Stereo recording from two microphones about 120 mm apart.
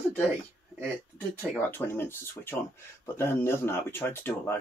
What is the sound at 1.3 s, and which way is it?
Speech, 15° left (ahead or behind).